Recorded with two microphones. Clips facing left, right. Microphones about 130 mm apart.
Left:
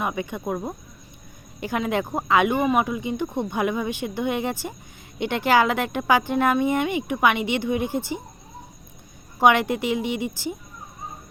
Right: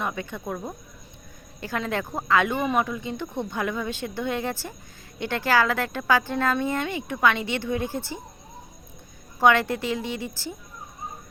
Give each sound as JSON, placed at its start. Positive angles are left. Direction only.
{"t": 0.0, "sound": "speech", "side_deg": 15}
{"t": 9.4, "sound": "speech", "side_deg": 15}